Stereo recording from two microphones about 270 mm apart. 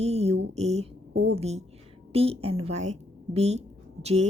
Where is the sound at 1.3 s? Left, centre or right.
Right.